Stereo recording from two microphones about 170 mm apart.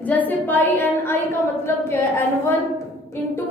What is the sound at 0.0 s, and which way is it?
A woman's voice, 10° left (ahead or behind).